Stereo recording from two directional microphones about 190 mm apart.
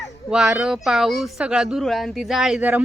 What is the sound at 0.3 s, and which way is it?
Speech, 5° right (ahead or behind).